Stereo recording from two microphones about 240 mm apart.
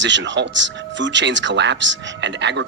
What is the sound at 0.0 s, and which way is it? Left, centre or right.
Speech, right.